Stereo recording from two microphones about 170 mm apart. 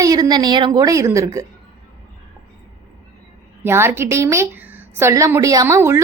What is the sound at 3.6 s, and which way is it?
A woman's voice, 15° right (ahead or behind).